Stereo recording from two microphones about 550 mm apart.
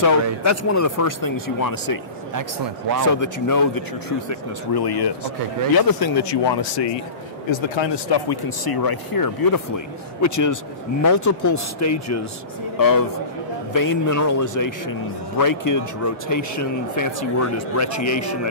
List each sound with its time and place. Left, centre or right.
0.0 s a man's voice: left
3.1 s a man's voice: left